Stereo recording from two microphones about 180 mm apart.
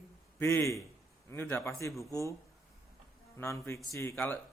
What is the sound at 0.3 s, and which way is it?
A man's voice, 15° left (ahead or behind).